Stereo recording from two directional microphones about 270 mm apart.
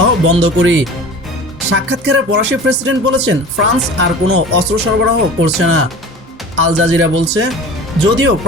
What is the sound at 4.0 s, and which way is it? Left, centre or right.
Speech, right.